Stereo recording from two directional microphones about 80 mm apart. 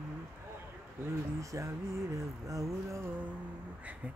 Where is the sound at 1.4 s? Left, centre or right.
Right.